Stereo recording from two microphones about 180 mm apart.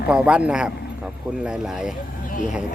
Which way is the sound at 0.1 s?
5° right (ahead or behind).